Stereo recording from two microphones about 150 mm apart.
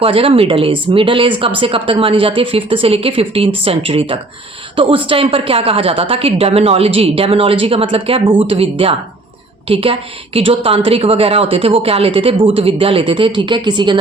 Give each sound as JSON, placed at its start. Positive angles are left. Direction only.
{"t": 0.0, "sound": "speech", "side_deg": -40}